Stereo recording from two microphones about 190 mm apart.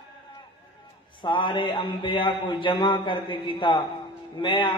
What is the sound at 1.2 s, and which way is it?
A man's voice, 25° left (ahead or behind).